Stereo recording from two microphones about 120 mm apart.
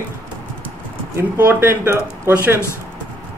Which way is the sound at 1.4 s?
15° right (ahead or behind).